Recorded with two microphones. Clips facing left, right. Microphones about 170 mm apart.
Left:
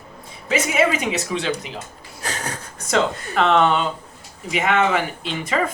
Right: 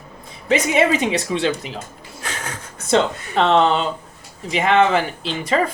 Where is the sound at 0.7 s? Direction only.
35° right (ahead or behind).